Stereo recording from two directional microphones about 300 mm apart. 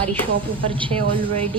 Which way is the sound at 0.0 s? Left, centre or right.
Centre.